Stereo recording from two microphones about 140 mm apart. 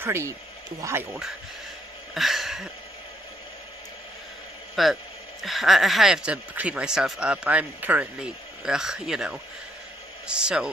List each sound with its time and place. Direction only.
0.0 s speech: 20° right (ahead or behind)
2.1 s a sound: centre (ahead or behind)
4.8 s speech: centre (ahead or behind)